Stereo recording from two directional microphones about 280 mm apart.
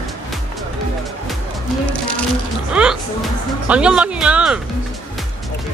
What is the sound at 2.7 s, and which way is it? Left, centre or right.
Speech, centre.